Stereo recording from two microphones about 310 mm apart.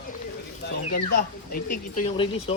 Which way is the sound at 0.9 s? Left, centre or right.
Left.